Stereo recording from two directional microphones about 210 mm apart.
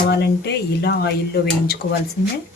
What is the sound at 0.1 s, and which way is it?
Speech, 50° left (ahead or behind).